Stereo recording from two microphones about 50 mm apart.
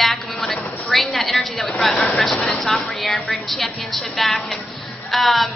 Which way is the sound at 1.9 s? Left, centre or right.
Left.